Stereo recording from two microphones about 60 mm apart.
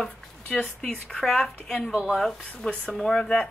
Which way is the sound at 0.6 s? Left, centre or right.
Centre.